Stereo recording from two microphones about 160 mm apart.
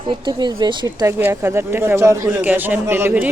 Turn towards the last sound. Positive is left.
turn(degrees=-10)  # may be behind; listen again after turning